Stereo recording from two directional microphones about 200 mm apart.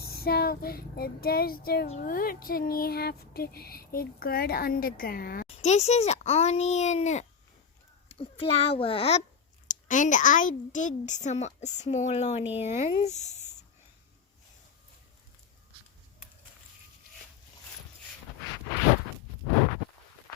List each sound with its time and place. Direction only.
0.0 s child singing: 50° left (ahead or behind)
2.0 s a sound: 45° left (ahead or behind)
5.5 s a woman's voice: 30° left (ahead or behind)